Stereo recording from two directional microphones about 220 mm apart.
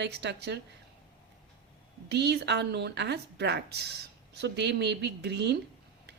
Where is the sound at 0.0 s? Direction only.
50° right (ahead or behind).